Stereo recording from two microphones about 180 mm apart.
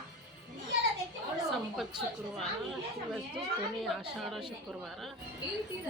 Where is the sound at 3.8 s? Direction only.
Centre (ahead or behind).